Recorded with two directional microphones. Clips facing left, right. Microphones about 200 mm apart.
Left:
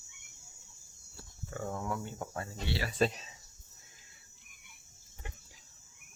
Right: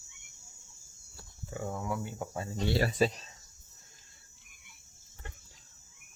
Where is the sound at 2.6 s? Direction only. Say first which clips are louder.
Right 8 dB; 40° right (ahead or behind).